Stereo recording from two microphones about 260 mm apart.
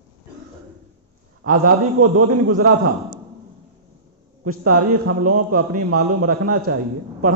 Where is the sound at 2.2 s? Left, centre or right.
Right.